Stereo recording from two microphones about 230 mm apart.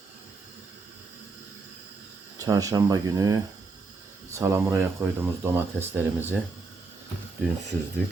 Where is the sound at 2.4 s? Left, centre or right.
Centre.